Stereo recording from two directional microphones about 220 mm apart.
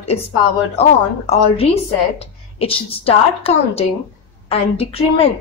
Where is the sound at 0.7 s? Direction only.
30° left (ahead or behind).